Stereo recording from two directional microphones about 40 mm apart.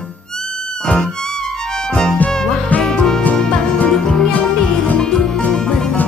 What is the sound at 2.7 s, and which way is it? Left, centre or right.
Music, centre.